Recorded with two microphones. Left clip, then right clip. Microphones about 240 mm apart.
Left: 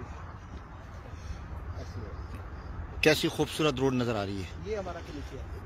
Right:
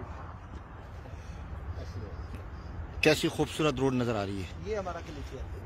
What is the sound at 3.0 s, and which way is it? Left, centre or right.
A man's voice, centre.